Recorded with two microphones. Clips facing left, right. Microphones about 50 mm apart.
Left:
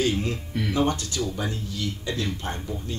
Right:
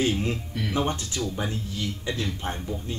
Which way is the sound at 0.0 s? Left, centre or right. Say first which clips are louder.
Even; right.